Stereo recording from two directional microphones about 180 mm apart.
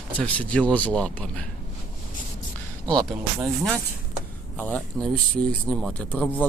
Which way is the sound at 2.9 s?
20° right (ahead or behind).